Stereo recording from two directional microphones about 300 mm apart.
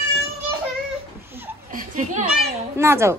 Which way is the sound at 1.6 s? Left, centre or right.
Right.